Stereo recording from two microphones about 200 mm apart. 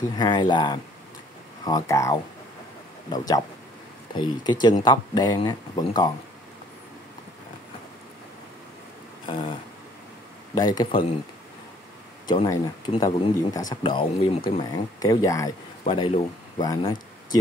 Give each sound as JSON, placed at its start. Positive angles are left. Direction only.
{"t": 0.2, "sound": "speech", "side_deg": 20}
{"t": 9.2, "sound": "a sound", "side_deg": 25}
{"t": 10.5, "sound": "speech", "side_deg": 20}
{"t": 12.3, "sound": "speech", "side_deg": 20}
{"t": 15.8, "sound": "speech", "side_deg": 25}